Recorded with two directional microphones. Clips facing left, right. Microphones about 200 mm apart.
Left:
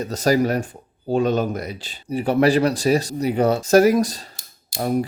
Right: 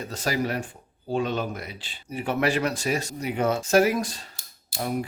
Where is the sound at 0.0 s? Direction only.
40° left (ahead or behind).